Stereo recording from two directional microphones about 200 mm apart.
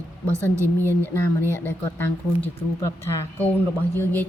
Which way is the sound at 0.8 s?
10° left (ahead or behind).